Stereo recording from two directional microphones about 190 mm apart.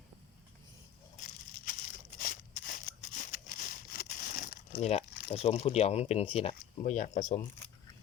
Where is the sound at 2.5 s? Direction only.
45° left (ahead or behind).